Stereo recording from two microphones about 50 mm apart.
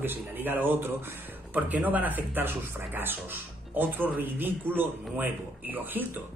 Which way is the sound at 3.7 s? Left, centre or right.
Right.